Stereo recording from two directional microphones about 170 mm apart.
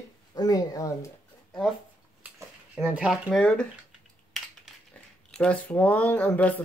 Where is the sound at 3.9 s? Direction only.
Centre (ahead or behind).